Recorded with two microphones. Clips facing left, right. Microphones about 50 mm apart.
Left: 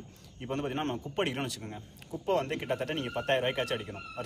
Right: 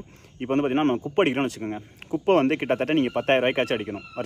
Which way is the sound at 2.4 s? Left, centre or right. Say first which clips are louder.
Right 10 dB; right.